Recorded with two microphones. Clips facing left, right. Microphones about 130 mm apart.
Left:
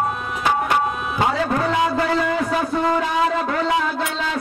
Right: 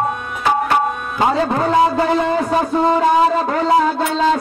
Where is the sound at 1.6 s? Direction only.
35° right (ahead or behind).